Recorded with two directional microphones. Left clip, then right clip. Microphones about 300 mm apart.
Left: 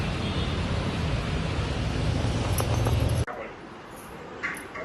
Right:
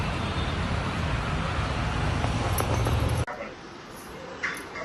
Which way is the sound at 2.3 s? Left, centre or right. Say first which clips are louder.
Right 1 dB; centre.